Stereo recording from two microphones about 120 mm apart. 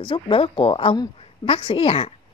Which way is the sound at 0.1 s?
50° left (ahead or behind).